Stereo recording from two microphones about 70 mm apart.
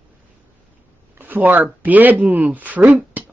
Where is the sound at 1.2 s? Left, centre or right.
Right.